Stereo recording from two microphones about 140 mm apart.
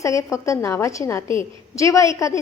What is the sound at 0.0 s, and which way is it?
A woman's voice, 20° left (ahead or behind).